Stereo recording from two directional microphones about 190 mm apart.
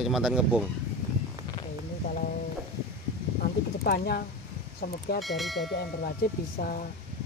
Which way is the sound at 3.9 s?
55° left (ahead or behind).